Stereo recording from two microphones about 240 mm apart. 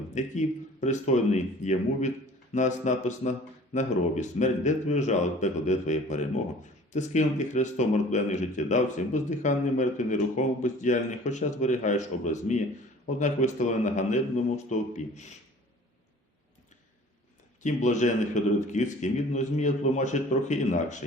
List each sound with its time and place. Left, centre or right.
0.1 s speech: left
17.6 s a man's voice: left